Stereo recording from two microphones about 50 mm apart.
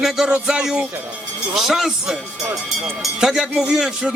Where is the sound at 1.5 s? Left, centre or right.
Centre.